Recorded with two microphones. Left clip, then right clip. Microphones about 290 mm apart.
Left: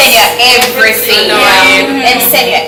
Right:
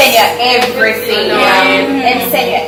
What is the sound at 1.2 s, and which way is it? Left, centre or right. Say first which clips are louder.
A woman's voice: left 3 dB; centre.